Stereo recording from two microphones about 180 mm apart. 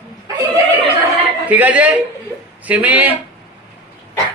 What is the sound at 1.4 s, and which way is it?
A man's voice, 10° right (ahead or behind).